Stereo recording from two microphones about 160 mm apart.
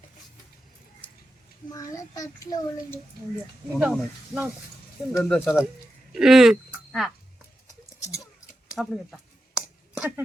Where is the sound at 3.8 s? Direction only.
5° right (ahead or behind).